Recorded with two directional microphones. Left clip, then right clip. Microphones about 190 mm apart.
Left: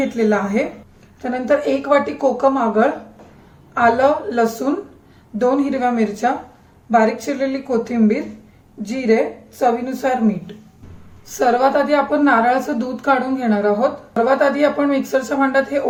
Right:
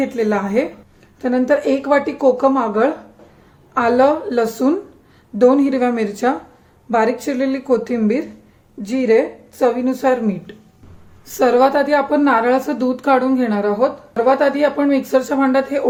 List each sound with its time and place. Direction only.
0.0 s a woman's voice: 45° right (ahead or behind)